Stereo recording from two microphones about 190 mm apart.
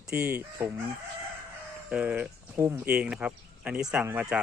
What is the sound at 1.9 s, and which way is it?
Speech, 5° right (ahead or behind).